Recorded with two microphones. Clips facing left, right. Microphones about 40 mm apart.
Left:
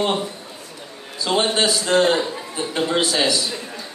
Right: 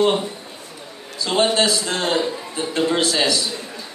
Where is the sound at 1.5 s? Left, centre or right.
Centre.